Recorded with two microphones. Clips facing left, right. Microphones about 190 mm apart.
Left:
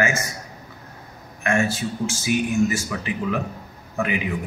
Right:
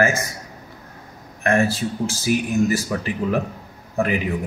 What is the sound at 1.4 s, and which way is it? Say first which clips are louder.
A man's voice: right 3 dB; 35° right (ahead or behind).